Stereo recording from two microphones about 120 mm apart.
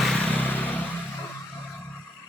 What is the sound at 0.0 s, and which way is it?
Vehicle, 10° left (ahead or behind).